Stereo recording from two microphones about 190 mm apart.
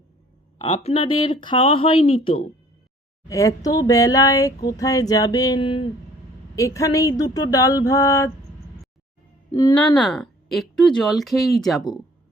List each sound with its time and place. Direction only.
0.6 s speech: 30° left (ahead or behind)
3.2 s speech: 15° left (ahead or behind)
6.6 s a sound: 15° left (ahead or behind)
9.5 s speech: 20° left (ahead or behind)
9.7 s speech: 5° left (ahead or behind)